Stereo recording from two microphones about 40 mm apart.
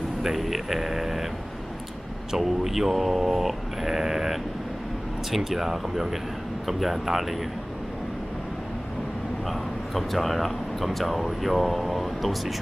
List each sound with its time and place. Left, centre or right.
0.2 s speech: centre
2.3 s speech: centre
9.5 s speech: centre